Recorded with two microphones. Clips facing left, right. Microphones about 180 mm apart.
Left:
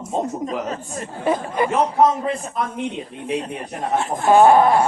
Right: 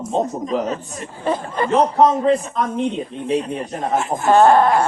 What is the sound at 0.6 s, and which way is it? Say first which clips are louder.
Speech: right 2 dB; 40° left (ahead or behind).